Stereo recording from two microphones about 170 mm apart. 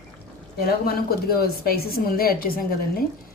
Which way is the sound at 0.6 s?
65° left (ahead or behind).